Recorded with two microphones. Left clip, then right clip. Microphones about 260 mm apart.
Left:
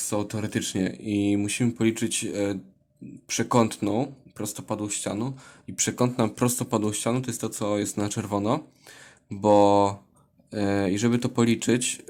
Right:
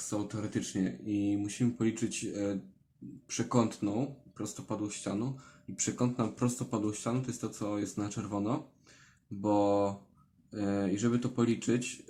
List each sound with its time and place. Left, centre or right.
0.1 s speech: left